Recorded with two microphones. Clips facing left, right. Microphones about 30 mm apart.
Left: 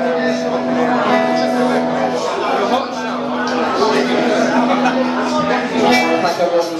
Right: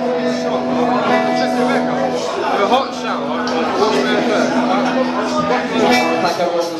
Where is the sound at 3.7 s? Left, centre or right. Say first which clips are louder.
Even; left.